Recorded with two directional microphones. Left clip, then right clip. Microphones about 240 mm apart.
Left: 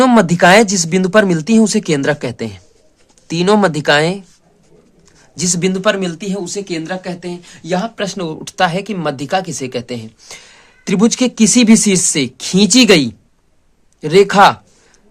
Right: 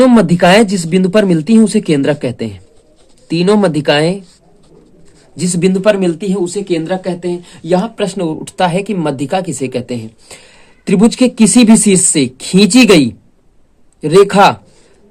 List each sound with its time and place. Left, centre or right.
0.0 s speech: left
5.4 s speech: centre